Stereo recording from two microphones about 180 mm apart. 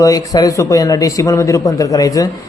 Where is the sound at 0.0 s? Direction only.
20° left (ahead or behind).